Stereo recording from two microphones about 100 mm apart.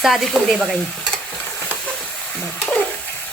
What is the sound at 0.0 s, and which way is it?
Speech, centre (ahead or behind).